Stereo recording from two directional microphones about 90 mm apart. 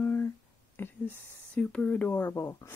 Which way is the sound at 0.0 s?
25° left (ahead or behind).